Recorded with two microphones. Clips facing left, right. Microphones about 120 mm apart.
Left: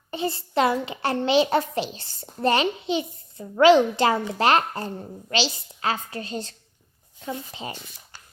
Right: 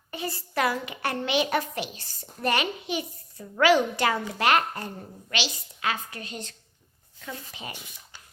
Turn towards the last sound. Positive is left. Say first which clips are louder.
# left 6 dB
turn(degrees=25)  # may be behind; listen again after turning